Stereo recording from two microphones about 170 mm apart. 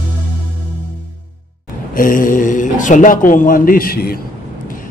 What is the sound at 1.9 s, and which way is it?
A man's voice, 50° left (ahead or behind).